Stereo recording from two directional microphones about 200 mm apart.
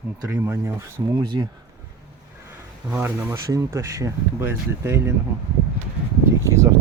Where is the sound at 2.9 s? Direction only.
10° right (ahead or behind).